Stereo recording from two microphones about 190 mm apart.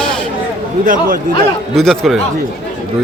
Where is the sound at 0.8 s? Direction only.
45° right (ahead or behind).